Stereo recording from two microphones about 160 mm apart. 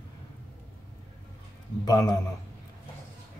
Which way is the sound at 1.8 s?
25° left (ahead or behind).